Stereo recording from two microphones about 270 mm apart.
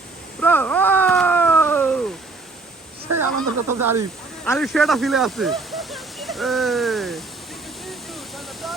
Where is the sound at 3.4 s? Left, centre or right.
Right.